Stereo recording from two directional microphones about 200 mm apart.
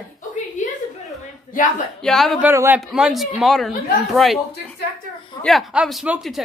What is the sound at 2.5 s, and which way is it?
A man's voice, 10° right (ahead or behind).